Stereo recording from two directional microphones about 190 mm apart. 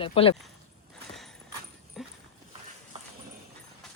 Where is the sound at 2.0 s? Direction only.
Centre (ahead or behind).